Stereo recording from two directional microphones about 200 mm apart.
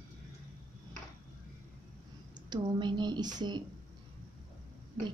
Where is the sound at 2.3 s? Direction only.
20° right (ahead or behind).